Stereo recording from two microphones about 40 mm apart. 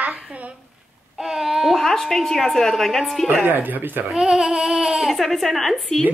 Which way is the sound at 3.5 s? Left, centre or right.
Right.